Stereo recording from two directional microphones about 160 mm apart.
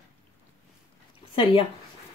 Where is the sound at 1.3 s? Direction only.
35° left (ahead or behind).